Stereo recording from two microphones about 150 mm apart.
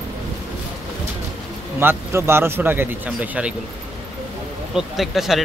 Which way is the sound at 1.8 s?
15° right (ahead or behind).